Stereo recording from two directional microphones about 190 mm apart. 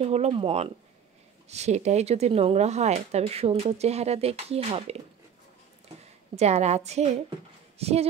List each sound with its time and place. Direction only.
0.0 s speech: 35° right (ahead or behind)
6.3 s speech: 35° right (ahead or behind)